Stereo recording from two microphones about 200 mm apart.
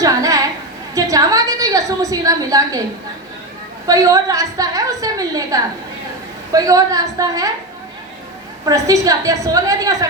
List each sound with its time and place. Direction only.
0.0 s a sound: 15° right (ahead or behind)
3.8 s a woman's voice: 15° right (ahead or behind)
8.6 s a woman's voice: 15° right (ahead or behind)